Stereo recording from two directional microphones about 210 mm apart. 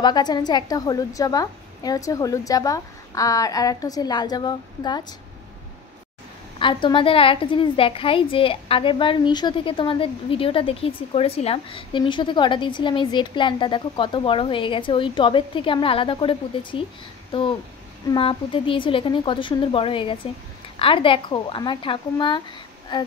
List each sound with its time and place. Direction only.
0.0 s a woman's voice: 20° left (ahead or behind)
6.6 s a woman's voice: 25° left (ahead or behind)